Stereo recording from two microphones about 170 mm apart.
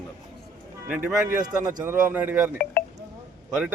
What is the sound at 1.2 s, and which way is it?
Speech, 20° right (ahead or behind).